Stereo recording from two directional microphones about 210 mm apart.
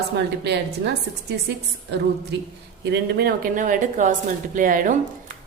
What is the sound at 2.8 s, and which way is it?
A woman's voice, 50° right (ahead or behind).